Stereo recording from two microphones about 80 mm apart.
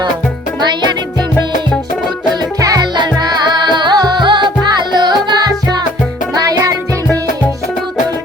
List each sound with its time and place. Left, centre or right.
2.6 s music: right
2.9 s music: right